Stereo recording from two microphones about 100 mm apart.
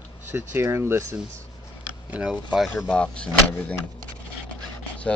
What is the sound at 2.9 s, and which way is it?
Speech, 10° left (ahead or behind).